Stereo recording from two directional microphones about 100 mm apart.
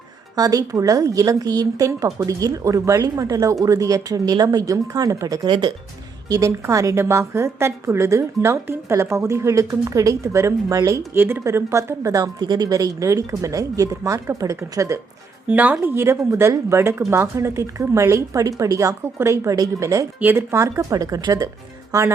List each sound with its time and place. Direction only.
0.3 s a woman's voice: 35° right (ahead or behind)
5.5 s speech: 50° right (ahead or behind)
6.2 s a woman's voice: 35° right (ahead or behind)
15.4 s speech: 15° right (ahead or behind)
15.8 s a woman's voice: 25° right (ahead or behind)
20.1 s a woman's voice: 25° right (ahead or behind)